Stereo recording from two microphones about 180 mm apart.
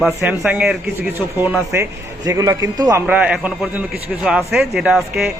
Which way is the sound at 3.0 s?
5° right (ahead or behind).